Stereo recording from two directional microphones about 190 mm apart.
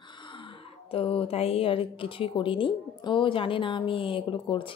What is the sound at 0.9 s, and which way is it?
A woman's voice, 30° left (ahead or behind).